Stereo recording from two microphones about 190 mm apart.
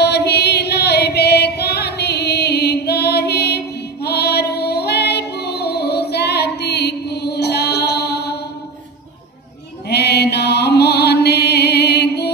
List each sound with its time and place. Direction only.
0.0 s music: 60° left (ahead or behind)
9.8 s music: 60° left (ahead or behind)